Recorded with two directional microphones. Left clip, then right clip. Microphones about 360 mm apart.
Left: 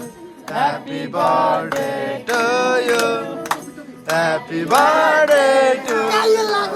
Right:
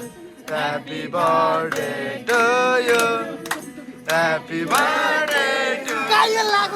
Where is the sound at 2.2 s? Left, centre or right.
Centre.